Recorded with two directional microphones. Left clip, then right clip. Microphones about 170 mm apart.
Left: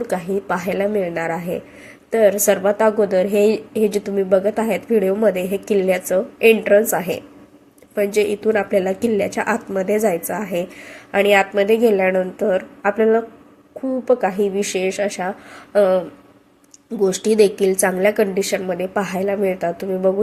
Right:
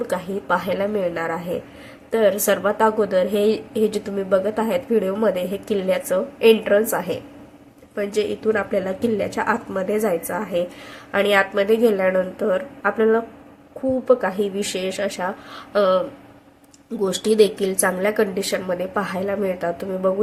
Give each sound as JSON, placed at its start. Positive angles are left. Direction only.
{"t": 0.1, "sound": "a woman's voice", "side_deg": 15}